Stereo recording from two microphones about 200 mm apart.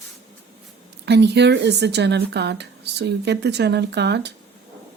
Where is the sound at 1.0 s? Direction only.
55° right (ahead or behind).